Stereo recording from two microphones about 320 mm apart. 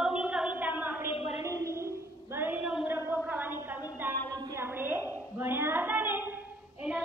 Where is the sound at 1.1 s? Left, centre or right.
Centre.